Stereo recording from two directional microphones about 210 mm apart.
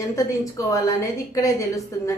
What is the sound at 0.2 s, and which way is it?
Speech, 15° left (ahead or behind).